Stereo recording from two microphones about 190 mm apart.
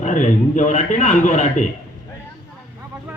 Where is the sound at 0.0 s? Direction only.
40° left (ahead or behind).